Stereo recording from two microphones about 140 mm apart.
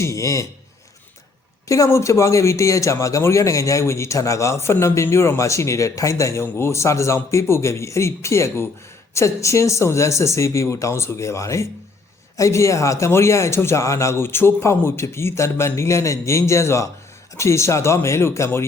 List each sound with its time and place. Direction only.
0.0 s speech: 20° left (ahead or behind)
1.6 s speech: 20° left (ahead or behind)